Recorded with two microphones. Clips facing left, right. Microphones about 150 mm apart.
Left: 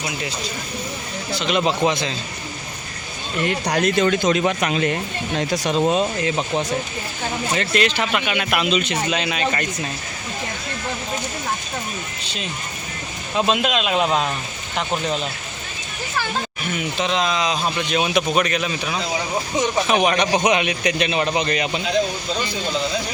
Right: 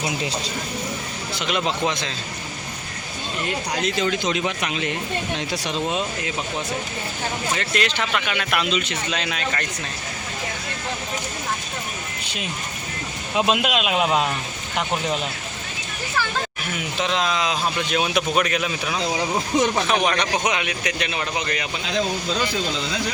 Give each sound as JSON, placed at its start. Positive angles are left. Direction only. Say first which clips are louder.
{"t": 1.5, "sound": "speech", "louder": "left 4 dB", "side_deg": 0}
{"t": 3.7, "sound": "speech", "louder": "left 6 dB", "side_deg": 50}
{"t": 7.5, "sound": "a man's voice", "louder": "left 5 dB", "side_deg": 25}
{"t": 7.9, "sound": "speech", "louder": "left 3 dB", "side_deg": 10}
{"t": 9.0, "sound": "speech", "louder": "left 4 dB", "side_deg": 5}
{"t": 13.3, "sound": "speech", "louder": "left 1 dB", "side_deg": -10}
{"t": 16.7, "sound": "speech", "louder": "left 2 dB", "side_deg": 0}
{"t": 19.9, "sound": "a man's voice", "louder": "left 3 dB", "side_deg": 10}